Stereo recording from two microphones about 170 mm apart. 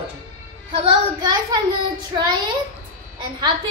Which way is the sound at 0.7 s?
30° right (ahead or behind).